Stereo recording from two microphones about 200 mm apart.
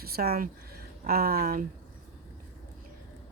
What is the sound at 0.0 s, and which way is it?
Speech, 50° right (ahead or behind).